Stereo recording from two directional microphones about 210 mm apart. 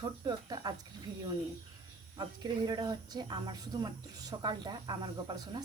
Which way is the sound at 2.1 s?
20° right (ahead or behind).